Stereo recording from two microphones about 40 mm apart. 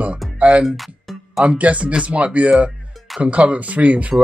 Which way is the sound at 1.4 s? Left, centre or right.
Right.